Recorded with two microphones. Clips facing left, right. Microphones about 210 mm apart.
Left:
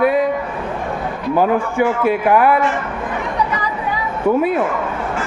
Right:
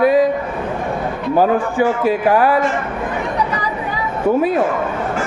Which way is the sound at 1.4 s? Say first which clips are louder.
Right 1 dB; 35° right (ahead or behind).